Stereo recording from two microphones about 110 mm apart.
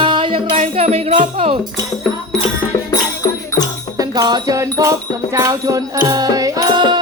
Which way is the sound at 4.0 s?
40° right (ahead or behind).